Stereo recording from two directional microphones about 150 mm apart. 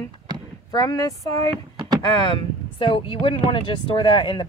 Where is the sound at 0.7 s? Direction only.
25° left (ahead or behind).